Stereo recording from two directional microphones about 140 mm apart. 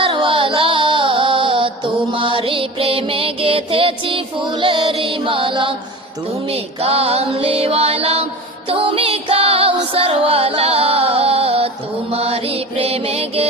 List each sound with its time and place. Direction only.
0.0 s music: 40° right (ahead or behind)